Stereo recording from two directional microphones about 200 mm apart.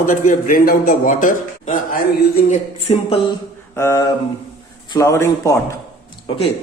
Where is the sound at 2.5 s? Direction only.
30° left (ahead or behind).